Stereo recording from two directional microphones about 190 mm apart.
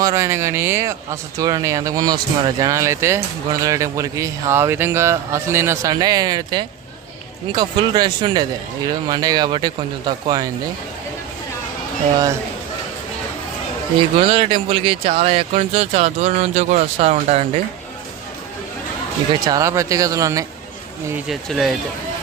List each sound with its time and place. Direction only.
0.0 s speech: 15° right (ahead or behind)
14.2 s speech: 30° right (ahead or behind)
19.3 s speech: 20° right (ahead or behind)
21.2 s speech: centre (ahead or behind)